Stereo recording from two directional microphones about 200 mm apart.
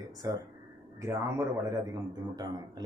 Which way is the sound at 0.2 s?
15° right (ahead or behind).